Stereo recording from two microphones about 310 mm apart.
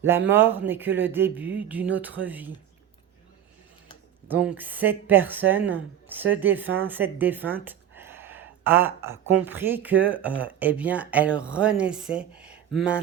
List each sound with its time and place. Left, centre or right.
0.0 s speech: centre
4.3 s speech: centre